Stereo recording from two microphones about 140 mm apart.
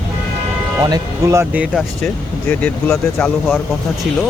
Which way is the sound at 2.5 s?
5° left (ahead or behind).